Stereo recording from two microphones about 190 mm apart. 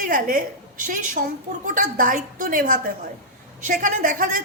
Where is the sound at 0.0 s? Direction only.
45° right (ahead or behind).